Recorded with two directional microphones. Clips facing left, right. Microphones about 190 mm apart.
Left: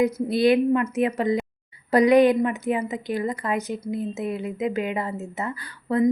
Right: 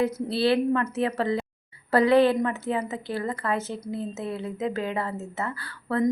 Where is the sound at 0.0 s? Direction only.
15° left (ahead or behind).